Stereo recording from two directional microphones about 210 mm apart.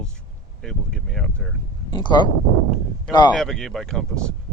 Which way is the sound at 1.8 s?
20° left (ahead or behind).